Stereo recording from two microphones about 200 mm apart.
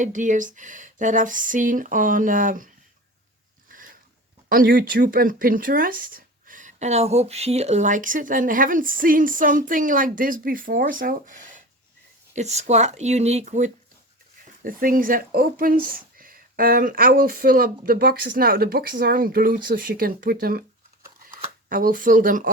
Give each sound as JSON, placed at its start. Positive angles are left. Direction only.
{"t": 0.0, "sound": "speech", "side_deg": -40}
{"t": 3.7, "sound": "a sound", "side_deg": -45}
{"t": 4.4, "sound": "speech", "side_deg": -45}
{"t": 21.2, "sound": "shuffling cards", "side_deg": -45}